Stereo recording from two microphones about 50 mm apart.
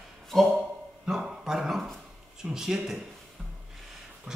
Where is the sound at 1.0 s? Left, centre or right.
Centre.